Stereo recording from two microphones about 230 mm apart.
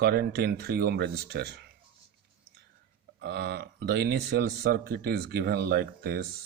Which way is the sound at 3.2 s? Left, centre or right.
Right.